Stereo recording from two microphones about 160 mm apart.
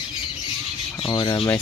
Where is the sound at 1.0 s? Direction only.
35° left (ahead or behind).